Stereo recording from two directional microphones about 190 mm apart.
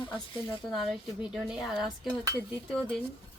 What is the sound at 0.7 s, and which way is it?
A woman's voice, centre (ahead or behind).